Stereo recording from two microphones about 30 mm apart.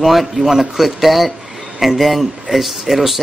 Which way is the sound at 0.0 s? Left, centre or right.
Centre.